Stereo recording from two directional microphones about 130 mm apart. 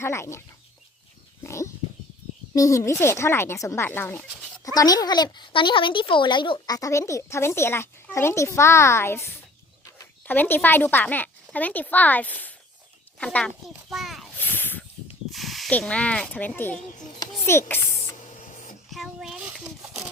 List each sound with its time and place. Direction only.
0.0 s speech: 20° left (ahead or behind)
1.5 s a sound: 20° left (ahead or behind)
2.5 s speech: 25° left (ahead or behind)
4.7 s a child's voice: 30° left (ahead or behind); by 14.3 s centre (ahead or behind)
14.3 s snake: 15° left (ahead or behind)
15.3 s snake: centre (ahead or behind)
15.8 s speech: 10° left (ahead or behind)
18.3 s a sound: 80° left
18.9 s a sound: centre (ahead or behind)
19.6 s zipper: 5° right (ahead or behind)